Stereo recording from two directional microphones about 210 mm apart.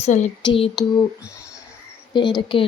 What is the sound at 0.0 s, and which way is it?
Speech, 35° left (ahead or behind).